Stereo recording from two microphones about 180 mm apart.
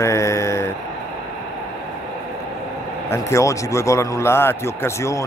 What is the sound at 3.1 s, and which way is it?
Speech, 15° left (ahead or behind).